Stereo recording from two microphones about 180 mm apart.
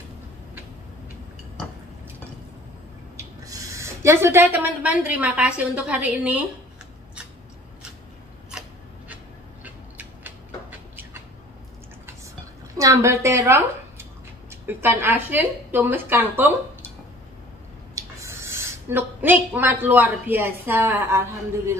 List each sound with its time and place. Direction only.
3.2 s speech: 20° right (ahead or behind)
9.1 s a sound: 10° right (ahead or behind)
12.7 s a woman's voice: 15° right (ahead or behind)
17.9 s a woman's voice: 15° right (ahead or behind)